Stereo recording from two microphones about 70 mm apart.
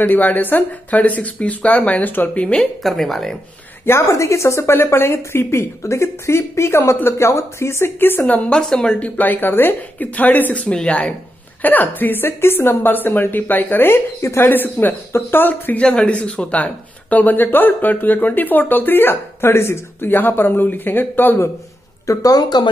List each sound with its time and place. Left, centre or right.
0.0 s speech: left; by 3.3 s centre
3.8 s a woman's voice: left
8.5 s speech: centre; by 15.8 s left
15.8 s speech: centre
22.0 s speech: left